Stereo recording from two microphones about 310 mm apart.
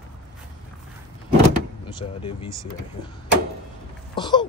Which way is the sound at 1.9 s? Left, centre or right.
Centre.